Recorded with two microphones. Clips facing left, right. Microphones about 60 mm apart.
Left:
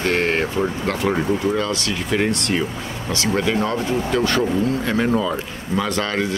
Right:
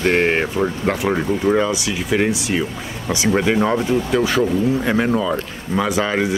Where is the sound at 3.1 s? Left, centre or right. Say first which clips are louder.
Right 3 dB; centre.